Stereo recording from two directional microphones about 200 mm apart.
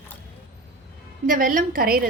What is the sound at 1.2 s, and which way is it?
Speech, 45° right (ahead or behind).